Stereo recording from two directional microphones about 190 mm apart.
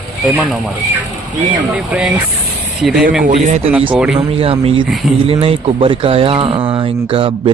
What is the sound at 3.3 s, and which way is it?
Speech, 40° right (ahead or behind).